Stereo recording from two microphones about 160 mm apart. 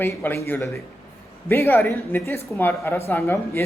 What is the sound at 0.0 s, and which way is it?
Speech, 15° left (ahead or behind).